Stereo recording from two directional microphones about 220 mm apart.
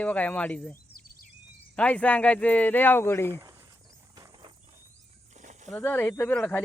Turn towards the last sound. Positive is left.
turn(degrees=10)  # may be behind; listen again after turning